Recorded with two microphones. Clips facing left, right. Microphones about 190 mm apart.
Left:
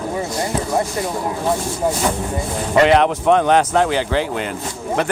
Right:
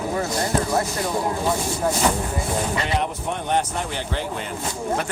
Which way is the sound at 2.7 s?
90° left.